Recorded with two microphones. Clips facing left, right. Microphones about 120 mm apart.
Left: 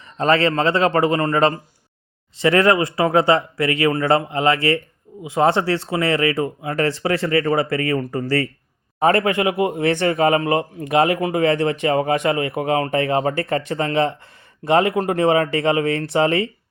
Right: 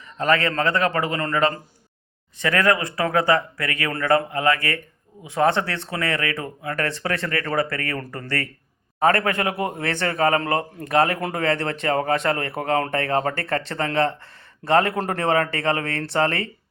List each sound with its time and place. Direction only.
0.2 s speech: 25° left (ahead or behind)
0.9 s a man's voice: 35° left (ahead or behind); by 16.5 s 15° left (ahead or behind)